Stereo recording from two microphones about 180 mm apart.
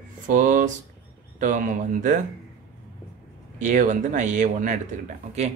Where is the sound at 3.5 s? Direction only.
45° right (ahead or behind).